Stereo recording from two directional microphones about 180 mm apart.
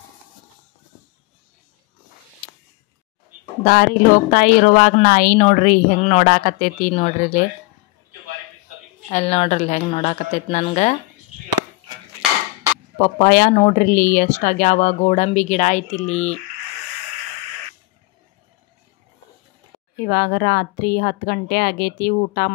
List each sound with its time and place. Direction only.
3.6 s a woman's voice: 55° left (ahead or behind)
5.9 s speech: 35° left (ahead or behind)
6.2 s speech: 50° left (ahead or behind)
9.1 s speech: 35° left (ahead or behind)
13.0 s speech: 50° left (ahead or behind)
20.1 s a woman's voice: 55° left (ahead or behind)